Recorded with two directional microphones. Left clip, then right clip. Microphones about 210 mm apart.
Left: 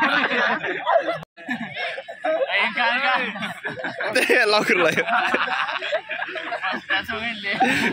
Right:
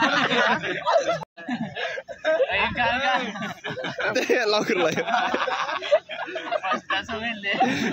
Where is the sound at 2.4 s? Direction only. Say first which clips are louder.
Left 2 dB; 25° right (ahead or behind).